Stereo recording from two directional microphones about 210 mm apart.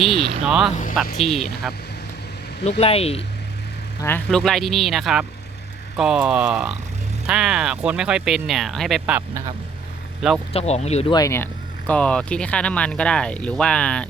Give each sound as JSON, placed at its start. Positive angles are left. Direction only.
{"t": 0.4, "sound": "speech", "side_deg": 0}
{"t": 2.6, "sound": "speech", "side_deg": 30}
{"t": 4.0, "sound": "speech", "side_deg": 5}
{"t": 10.5, "sound": "speech", "side_deg": 30}
{"t": 11.1, "sound": "speech", "side_deg": 15}